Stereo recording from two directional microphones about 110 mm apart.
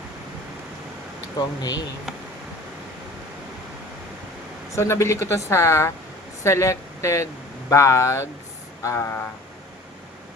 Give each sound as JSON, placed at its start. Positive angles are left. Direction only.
{"t": 1.4, "sound": "speech", "side_deg": 35}
{"t": 4.7, "sound": "speech", "side_deg": 25}